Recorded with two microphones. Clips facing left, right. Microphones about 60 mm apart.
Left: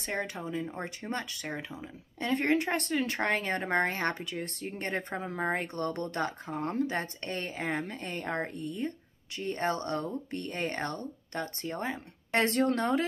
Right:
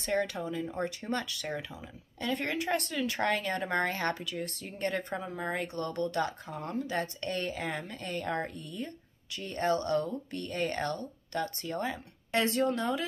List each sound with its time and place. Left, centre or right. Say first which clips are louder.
0.0 s speech: right 3 dB; left
2.1 s speech: left 5 dB; left
12.3 s speech: left 2 dB; left